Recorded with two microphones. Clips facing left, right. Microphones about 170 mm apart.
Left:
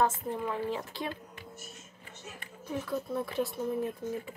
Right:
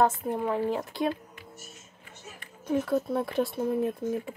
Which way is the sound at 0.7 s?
55° right (ahead or behind).